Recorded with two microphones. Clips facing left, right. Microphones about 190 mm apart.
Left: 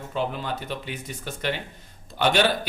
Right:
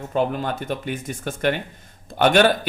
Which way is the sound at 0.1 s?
50° right (ahead or behind).